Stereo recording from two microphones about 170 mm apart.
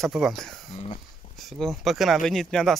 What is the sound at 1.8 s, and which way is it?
Speech, centre (ahead or behind).